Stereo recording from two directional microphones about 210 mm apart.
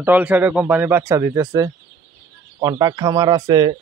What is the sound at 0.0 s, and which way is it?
Speech, 5° right (ahead or behind).